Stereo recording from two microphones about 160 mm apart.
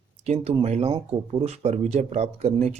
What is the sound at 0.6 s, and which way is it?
Speech, 40° right (ahead or behind).